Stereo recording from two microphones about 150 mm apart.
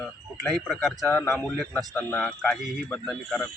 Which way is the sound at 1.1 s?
15° left (ahead or behind).